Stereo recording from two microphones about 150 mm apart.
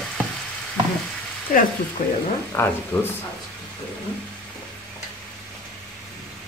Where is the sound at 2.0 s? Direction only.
70° left (ahead or behind).